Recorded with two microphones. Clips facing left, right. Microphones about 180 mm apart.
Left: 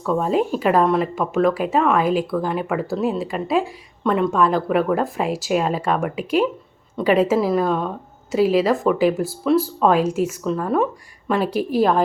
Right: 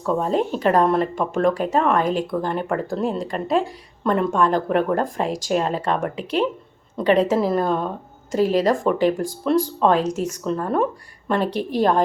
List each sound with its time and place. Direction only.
0.1 s a woman's voice: 5° left (ahead or behind)